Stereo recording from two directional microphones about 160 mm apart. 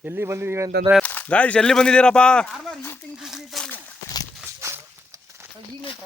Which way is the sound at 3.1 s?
Centre (ahead or behind).